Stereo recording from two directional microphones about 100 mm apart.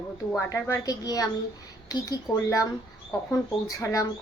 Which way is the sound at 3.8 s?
30° left (ahead or behind).